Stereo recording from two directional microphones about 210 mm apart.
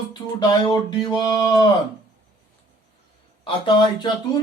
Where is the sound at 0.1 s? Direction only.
20° left (ahead or behind).